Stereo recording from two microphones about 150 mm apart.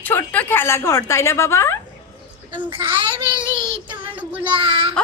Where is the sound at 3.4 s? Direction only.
30° right (ahead or behind).